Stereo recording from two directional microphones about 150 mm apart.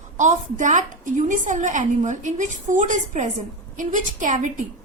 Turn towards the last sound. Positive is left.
turn(degrees=-55)  # may be behind; listen again after turning